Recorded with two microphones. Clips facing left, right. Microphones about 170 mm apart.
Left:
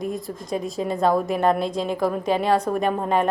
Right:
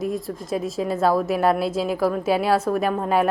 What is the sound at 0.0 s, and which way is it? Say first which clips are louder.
A woman's voice: right 2 dB; centre (ahead or behind).